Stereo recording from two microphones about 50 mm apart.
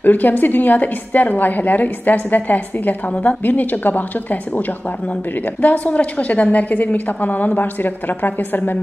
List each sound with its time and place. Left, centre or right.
0.0 s a woman's voice: left